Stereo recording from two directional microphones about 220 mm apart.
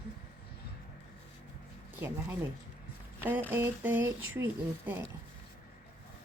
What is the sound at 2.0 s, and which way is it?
Speech, 10° right (ahead or behind).